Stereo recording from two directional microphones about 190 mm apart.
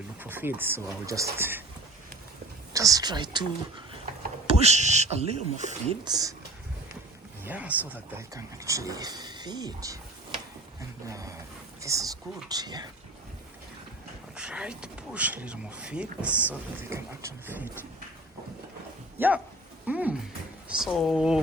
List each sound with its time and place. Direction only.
0.2 s speech: 10° right (ahead or behind)
2.7 s speech: 20° right (ahead or behind)
4.4 s speech: 35° right (ahead or behind)
6.1 s speech: 20° right (ahead or behind)
7.4 s speech: 10° right (ahead or behind)
11.1 s a sound: 15° right (ahead or behind)
11.8 s speech: 15° right (ahead or behind)
14.3 s speech: 5° right (ahead or behind)
19.2 s speech: 10° right (ahead or behind)